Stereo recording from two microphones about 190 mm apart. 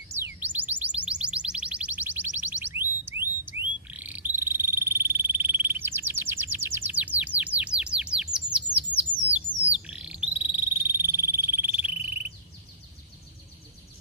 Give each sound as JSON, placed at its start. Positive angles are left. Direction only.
{"t": 0.2, "sound": "music", "side_deg": -10}
{"t": 8.5, "sound": "bird", "side_deg": -5}
{"t": 9.7, "sound": "frog", "side_deg": -5}